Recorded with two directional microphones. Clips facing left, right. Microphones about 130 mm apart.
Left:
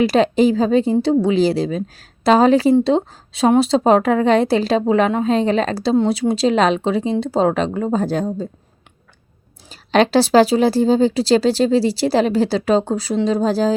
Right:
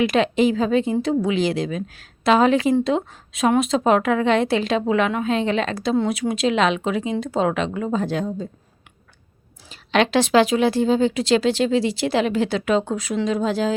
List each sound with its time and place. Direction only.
0.0 s speech: 35° left (ahead or behind)
9.6 s speech: 35° left (ahead or behind)